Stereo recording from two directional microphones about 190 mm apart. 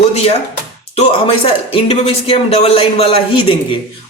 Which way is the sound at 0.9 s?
30° left (ahead or behind).